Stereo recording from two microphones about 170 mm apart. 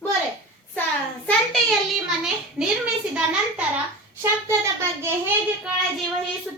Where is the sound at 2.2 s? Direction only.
5° right (ahead or behind).